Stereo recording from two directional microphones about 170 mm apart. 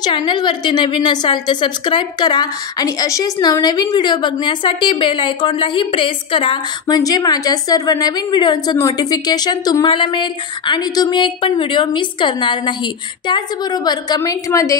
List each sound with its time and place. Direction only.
0.0 s a woman's voice: 25° left (ahead or behind)